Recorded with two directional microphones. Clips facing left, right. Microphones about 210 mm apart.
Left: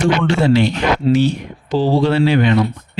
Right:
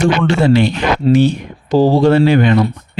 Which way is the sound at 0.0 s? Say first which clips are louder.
Right 2 dB; 50° right (ahead or behind).